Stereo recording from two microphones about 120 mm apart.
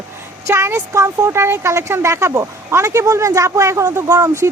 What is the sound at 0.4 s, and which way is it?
Speech, 25° right (ahead or behind).